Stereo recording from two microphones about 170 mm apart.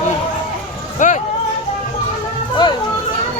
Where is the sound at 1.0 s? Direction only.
45° left (ahead or behind).